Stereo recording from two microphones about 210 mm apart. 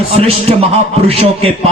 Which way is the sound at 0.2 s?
30° right (ahead or behind).